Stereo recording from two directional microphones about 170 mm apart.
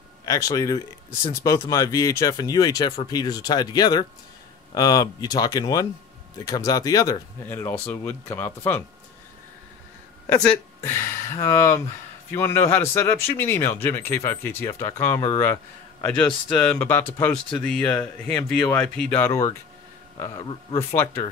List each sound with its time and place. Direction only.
0.2 s speech: 20° left (ahead or behind)
10.2 s speech: 15° left (ahead or behind)